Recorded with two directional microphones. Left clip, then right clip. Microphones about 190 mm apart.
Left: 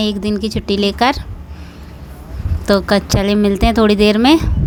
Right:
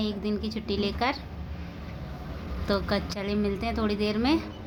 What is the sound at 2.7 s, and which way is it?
Speech, 45° left (ahead or behind).